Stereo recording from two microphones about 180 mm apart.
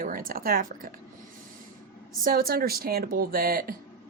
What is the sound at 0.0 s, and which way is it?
Speech, 50° right (ahead or behind).